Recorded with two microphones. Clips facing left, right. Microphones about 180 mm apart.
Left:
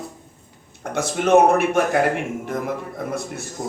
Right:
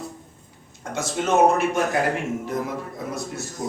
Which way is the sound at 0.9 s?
60° left (ahead or behind).